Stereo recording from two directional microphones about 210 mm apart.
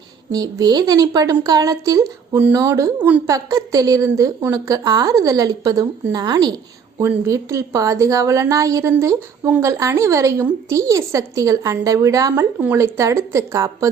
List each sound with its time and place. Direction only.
0.3 s a woman's voice: 15° right (ahead or behind)